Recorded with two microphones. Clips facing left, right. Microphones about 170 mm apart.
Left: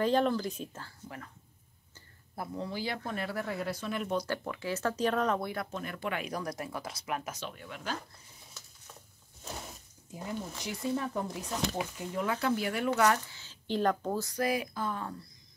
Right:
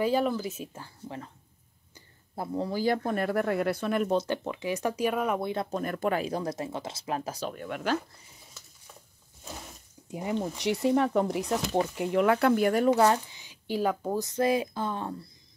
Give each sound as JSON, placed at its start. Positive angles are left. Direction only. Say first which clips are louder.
{"t": 0.0, "sound": "speech", "louder": "right 1 dB", "side_deg": -5}
{"t": 0.8, "sound": "speech", "louder": "right 5 dB", "side_deg": -25}
{"t": 2.3, "sound": "speech", "louder": "right 6 dB", "side_deg": -30}
{"t": 4.1, "sound": "speech", "louder": "right 5 dB", "side_deg": -20}
{"t": 5.4, "sound": "speech", "louder": "right 5 dB", "side_deg": -25}
{"t": 5.7, "sound": "speech", "louder": "right 8 dB", "side_deg": -45}
{"t": 7.6, "sound": "speech", "louder": "right 10 dB", "side_deg": -65}
{"t": 10.2, "sound": "speech", "louder": "right 9 dB", "side_deg": -75}
{"t": 13.3, "sound": "speech", "louder": "right 2 dB", "side_deg": -15}
{"t": 14.2, "sound": "speech", "louder": "right 8 dB", "side_deg": -25}